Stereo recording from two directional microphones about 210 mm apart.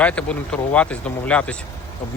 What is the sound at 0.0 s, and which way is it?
Speech, 5° left (ahead or behind).